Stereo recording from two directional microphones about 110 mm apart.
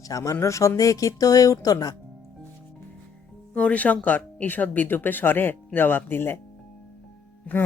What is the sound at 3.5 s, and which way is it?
Speech, 10° left (ahead or behind).